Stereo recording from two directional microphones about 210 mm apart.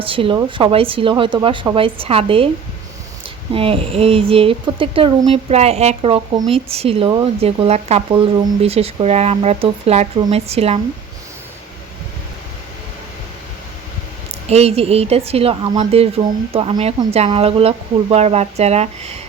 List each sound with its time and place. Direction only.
0.0 s a woman's voice: 25° right (ahead or behind)
3.5 s a woman's voice: 25° right (ahead or behind)
14.5 s a woman's voice: 30° right (ahead or behind)